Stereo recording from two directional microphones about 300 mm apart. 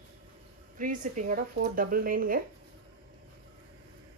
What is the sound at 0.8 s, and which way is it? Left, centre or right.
A woman's voice, right.